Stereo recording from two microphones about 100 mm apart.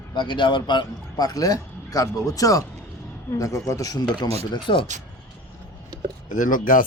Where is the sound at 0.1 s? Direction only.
50° left (ahead or behind); by 4.0 s 35° left (ahead or behind).